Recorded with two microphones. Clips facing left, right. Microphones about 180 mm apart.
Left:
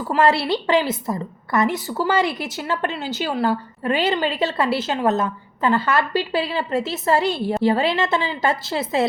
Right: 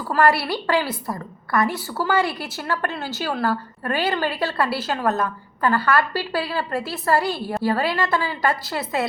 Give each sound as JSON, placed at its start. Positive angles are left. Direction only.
{"t": 0.1, "sound": "a woman's voice", "side_deg": 25}